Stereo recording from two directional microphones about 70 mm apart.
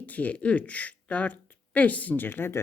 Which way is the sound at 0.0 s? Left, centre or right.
Left.